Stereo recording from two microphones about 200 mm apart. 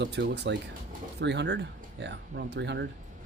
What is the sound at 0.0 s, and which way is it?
Speech, 60° right (ahead or behind).